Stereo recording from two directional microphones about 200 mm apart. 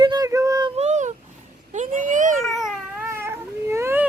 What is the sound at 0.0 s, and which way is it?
Female singing, 20° right (ahead or behind).